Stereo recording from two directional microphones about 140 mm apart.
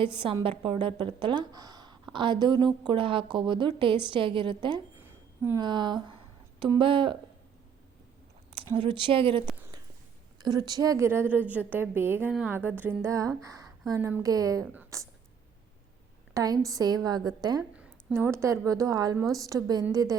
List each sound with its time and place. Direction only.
0.0 s a woman's voice: 35° right (ahead or behind)
4.9 s a sound: 15° right (ahead or behind)
5.5 s a woman's voice: 35° right (ahead or behind)
8.7 s a woman's voice: 35° right (ahead or behind)
10.4 s a woman's voice: 30° right (ahead or behind)
16.3 s a woman's voice: 25° right (ahead or behind)
18.1 s a woman's voice: 20° right (ahead or behind)